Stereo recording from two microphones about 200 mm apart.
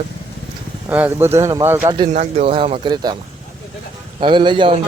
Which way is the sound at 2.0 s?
35° right (ahead or behind).